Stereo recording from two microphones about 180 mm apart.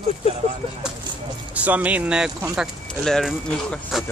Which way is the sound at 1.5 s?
10° right (ahead or behind).